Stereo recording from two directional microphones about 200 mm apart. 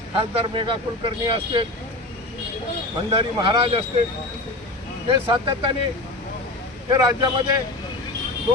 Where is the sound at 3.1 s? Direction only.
25° right (ahead or behind).